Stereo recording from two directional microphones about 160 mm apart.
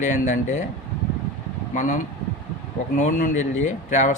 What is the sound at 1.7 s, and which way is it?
Speech, 50° left (ahead or behind).